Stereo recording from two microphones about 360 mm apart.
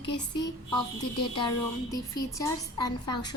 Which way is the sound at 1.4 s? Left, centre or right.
Centre.